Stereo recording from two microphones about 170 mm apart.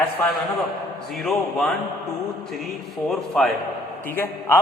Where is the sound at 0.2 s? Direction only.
10° left (ahead or behind).